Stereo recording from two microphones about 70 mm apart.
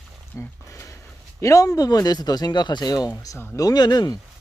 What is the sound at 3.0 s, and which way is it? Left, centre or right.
Speech, left.